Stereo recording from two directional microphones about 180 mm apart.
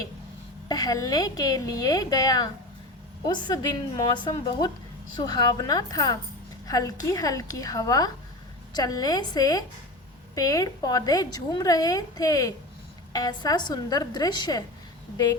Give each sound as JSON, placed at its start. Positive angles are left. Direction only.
{"t": 0.7, "sound": "a woman's voice", "side_deg": 20}